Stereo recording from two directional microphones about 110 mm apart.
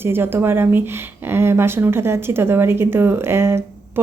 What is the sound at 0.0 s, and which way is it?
Speech, 20° right (ahead or behind).